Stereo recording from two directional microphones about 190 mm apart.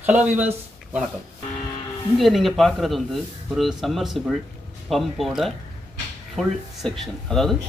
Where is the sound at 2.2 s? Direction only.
Centre (ahead or behind).